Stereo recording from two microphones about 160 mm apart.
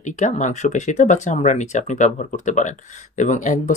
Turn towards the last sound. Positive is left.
turn(degrees=50)  # may be behind; listen again after turning